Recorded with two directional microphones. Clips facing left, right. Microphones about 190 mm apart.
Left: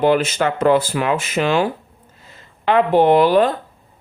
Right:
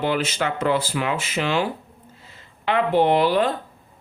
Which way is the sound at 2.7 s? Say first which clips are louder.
Left 5 dB; 50° left (ahead or behind).